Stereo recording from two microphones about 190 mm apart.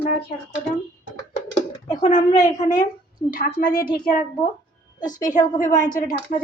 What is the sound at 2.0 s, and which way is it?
A woman's voice, 40° left (ahead or behind).